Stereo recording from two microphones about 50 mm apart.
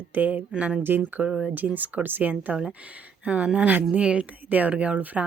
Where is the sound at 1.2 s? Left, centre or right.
Centre.